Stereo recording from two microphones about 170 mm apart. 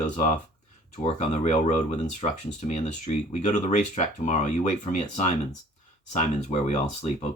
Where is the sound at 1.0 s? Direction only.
40° left (ahead or behind).